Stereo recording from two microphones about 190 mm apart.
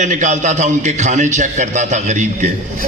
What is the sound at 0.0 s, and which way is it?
A man's voice, 40° right (ahead or behind).